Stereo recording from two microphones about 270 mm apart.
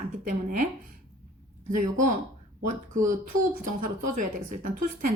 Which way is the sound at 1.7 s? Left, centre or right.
Right.